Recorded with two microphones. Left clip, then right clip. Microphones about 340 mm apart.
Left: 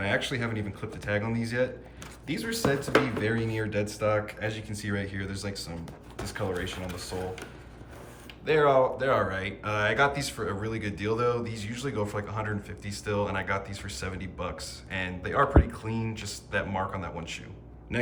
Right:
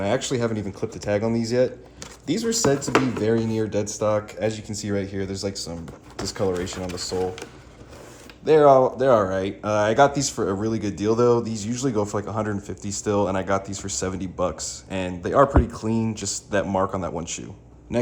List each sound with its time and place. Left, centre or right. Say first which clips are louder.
0.0 s speech: right 5 dB; centre
8.4 s speech: right 7 dB; centre